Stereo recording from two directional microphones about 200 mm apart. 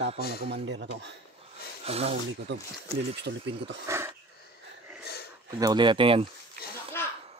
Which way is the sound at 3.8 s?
15° right (ahead or behind).